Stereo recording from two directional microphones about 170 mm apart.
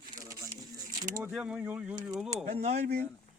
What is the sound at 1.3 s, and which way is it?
Speech, 5° right (ahead or behind).